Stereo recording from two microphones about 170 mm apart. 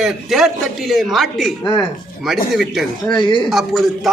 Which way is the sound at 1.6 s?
25° left (ahead or behind).